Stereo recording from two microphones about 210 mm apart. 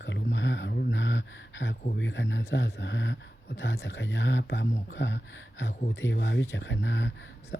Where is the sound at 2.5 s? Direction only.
55° left (ahead or behind).